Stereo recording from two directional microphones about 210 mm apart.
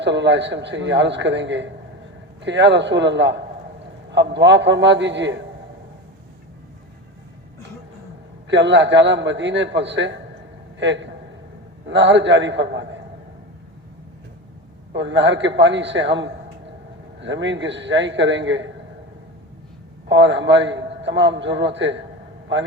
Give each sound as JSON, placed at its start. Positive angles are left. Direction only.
{"t": 0.0, "sound": "a man's voice", "side_deg": -55}
{"t": 8.4, "sound": "a man's voice", "side_deg": -55}
{"t": 14.9, "sound": "a man's voice", "side_deg": -60}
{"t": 20.1, "sound": "a man's voice", "side_deg": -60}